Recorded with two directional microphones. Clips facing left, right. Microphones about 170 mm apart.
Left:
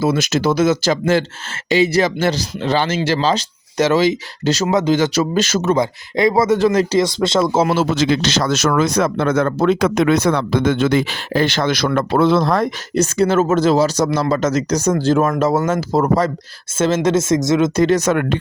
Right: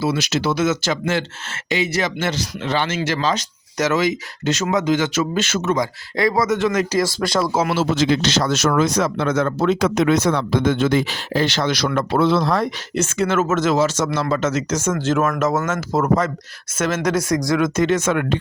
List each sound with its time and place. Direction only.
0.0 s speech: 50° left (ahead or behind); by 7.7 s 25° left (ahead or behind)
7.9 s speech: 90° left; by 18.3 s 45° left (ahead or behind)